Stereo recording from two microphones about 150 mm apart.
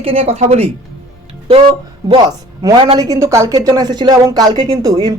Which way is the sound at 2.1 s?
30° right (ahead or behind).